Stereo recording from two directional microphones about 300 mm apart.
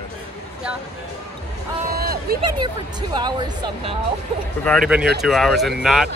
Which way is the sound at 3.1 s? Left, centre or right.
Centre.